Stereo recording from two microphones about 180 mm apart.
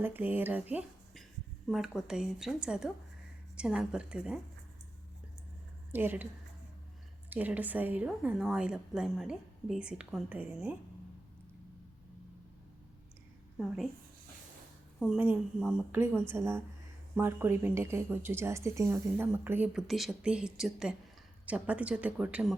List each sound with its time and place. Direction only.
0.0 s a woman's voice: 10° right (ahead or behind)
0.7 s a sound: 10° right (ahead or behind)
1.6 s a woman's voice: centre (ahead or behind)
5.9 s a woman's voice: 10° right (ahead or behind)
7.3 s a woman's voice: 10° right (ahead or behind)
14.9 s a woman's voice: centre (ahead or behind)